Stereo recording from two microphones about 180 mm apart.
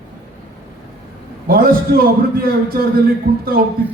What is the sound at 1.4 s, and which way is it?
A man's voice, 55° right (ahead or behind).